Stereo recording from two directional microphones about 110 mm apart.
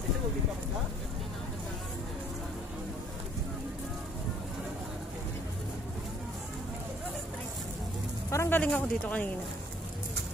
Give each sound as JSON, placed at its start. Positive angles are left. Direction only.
{"t": 8.3, "sound": "speech", "side_deg": 20}